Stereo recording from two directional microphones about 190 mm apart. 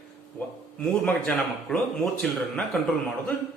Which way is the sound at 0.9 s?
5° left (ahead or behind).